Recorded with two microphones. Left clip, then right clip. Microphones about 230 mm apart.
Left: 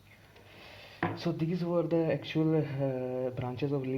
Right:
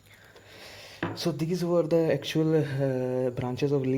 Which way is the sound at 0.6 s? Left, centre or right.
Right.